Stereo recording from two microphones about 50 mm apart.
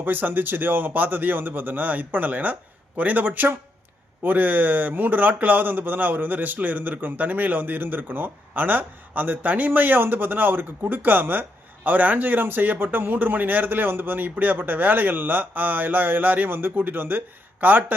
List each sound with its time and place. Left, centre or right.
0.0 s speech: right